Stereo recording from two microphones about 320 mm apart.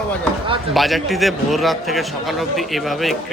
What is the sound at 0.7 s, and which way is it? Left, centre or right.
Speech, centre.